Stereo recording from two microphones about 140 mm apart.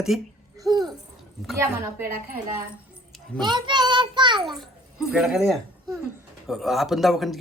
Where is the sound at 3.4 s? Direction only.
30° right (ahead or behind).